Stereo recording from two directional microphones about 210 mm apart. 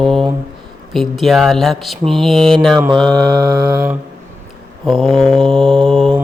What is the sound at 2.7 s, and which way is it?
Mantra, 20° right (ahead or behind).